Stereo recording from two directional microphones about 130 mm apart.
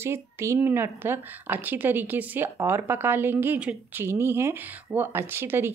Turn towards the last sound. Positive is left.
turn(degrees=-15)  # may be behind; listen again after turning